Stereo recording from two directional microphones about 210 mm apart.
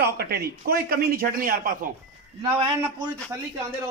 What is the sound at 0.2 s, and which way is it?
Speech, 50° right (ahead or behind).